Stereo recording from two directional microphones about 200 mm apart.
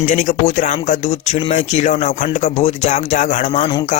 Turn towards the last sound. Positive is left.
turn(degrees=35)  # may be behind; listen again after turning